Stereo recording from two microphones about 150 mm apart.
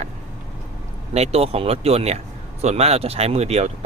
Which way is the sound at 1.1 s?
45° right (ahead or behind).